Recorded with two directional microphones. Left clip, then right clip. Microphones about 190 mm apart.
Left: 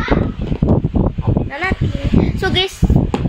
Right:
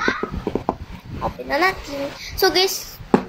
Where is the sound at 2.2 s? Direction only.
10° right (ahead or behind).